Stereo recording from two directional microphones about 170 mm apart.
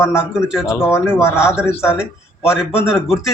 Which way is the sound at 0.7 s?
15° left (ahead or behind).